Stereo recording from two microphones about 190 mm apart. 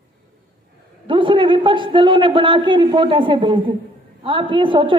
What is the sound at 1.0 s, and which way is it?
A man's voice, 25° right (ahead or behind).